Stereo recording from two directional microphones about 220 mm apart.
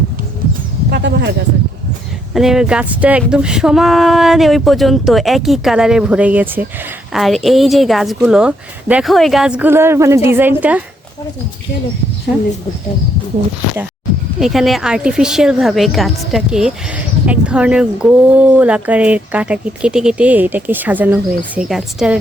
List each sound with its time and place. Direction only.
0.9 s speech: 50° right (ahead or behind)
2.3 s a woman's voice: centre (ahead or behind)
14.3 s a woman's voice: centre (ahead or behind)